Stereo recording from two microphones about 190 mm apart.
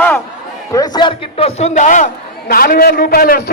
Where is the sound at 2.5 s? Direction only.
50° left (ahead or behind).